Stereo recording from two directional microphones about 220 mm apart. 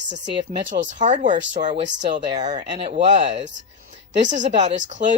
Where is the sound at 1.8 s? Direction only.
55° right (ahead or behind).